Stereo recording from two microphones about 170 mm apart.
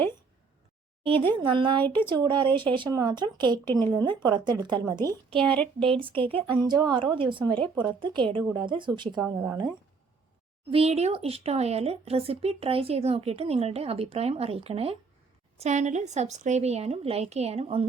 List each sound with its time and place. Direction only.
1.0 s speech: 30° right (ahead or behind)
5.5 s speech: 5° left (ahead or behind)
6.0 s speech: 30° right (ahead or behind)
9.2 s speech: 10° right (ahead or behind)
10.7 s speech: 35° right (ahead or behind)